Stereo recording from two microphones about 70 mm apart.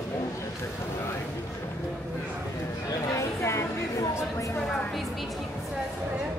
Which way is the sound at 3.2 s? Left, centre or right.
Left.